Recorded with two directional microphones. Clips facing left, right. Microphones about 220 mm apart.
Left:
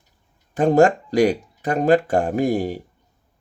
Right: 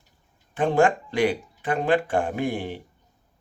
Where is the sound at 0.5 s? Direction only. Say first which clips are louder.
Left 5 dB; 40° left (ahead or behind).